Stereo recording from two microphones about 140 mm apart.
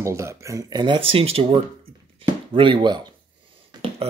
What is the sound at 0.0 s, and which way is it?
Speech, 20° right (ahead or behind).